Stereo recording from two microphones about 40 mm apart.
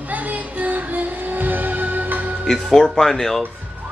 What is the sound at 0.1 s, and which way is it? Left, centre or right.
Music, right.